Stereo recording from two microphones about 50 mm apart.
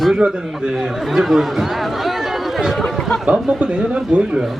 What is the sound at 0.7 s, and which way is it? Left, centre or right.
Speech, centre.